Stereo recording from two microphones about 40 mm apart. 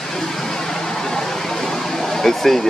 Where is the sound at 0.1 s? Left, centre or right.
Centre.